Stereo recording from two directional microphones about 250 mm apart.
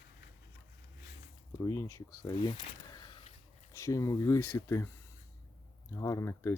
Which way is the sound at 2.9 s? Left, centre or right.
Centre.